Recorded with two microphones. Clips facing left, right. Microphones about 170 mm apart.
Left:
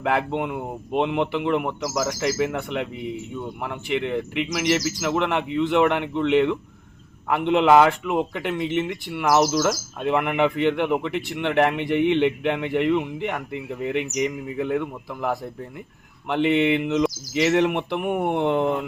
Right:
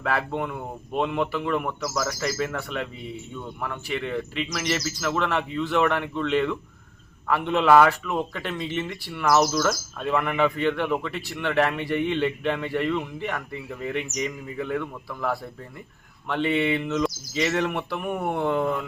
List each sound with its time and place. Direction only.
0.0 s a man's voice: 20° left (ahead or behind)